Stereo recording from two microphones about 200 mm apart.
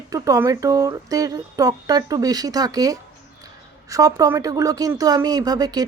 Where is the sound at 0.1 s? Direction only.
15° right (ahead or behind).